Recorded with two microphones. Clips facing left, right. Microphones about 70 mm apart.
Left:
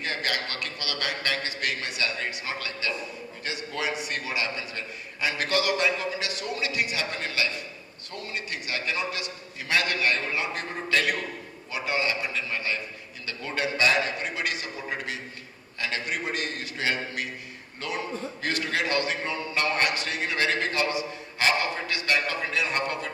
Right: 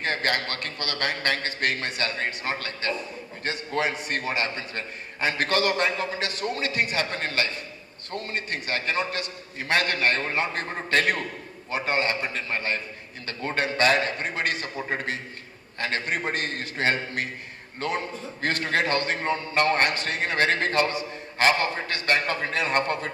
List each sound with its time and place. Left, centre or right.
0.0 s a man's voice: right